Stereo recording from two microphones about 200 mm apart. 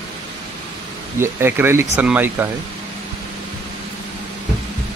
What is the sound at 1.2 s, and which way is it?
Speech, 10° right (ahead or behind).